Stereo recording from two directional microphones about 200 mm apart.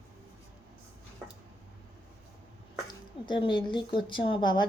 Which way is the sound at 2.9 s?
25° left (ahead or behind).